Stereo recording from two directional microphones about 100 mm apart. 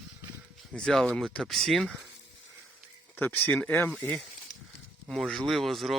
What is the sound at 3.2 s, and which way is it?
Speech, 20° left (ahead or behind).